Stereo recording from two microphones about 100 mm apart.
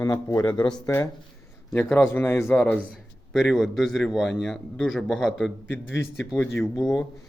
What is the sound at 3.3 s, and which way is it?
A man's voice, centre (ahead or behind).